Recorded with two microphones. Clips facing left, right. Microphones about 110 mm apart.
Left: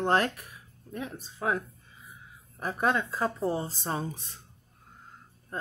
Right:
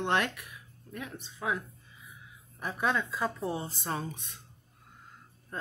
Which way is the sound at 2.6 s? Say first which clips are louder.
Left 3 dB; 40° left (ahead or behind).